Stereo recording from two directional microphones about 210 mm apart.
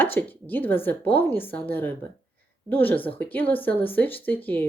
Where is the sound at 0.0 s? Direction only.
10° left (ahead or behind).